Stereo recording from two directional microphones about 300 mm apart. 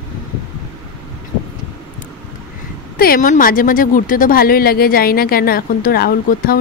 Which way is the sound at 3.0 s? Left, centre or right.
Left.